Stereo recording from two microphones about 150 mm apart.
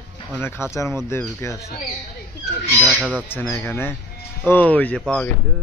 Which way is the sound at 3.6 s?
15° left (ahead or behind).